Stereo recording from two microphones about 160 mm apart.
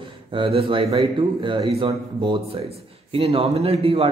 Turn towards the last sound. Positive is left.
turn(degrees=-35)  # may be behind; listen again after turning